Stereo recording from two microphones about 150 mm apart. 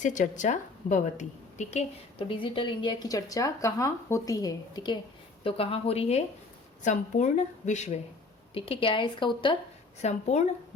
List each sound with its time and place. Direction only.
0.0 s a woman's voice: 55° left (ahead or behind); by 4.9 s 25° left (ahead or behind)
5.4 s a woman's voice: 40° left (ahead or behind)
6.8 s speech: 55° left (ahead or behind)
8.5 s a woman's voice: 40° left (ahead or behind)
10.0 s speech: 45° left (ahead or behind)